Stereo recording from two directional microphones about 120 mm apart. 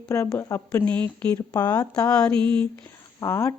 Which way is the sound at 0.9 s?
10° left (ahead or behind).